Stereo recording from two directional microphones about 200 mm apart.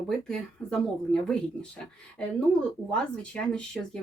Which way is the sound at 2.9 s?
5° left (ahead or behind).